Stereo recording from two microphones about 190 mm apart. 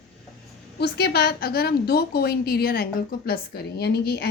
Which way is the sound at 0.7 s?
60° left (ahead or behind).